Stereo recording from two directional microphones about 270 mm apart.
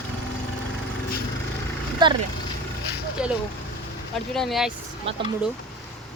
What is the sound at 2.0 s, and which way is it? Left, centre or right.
Speech, centre.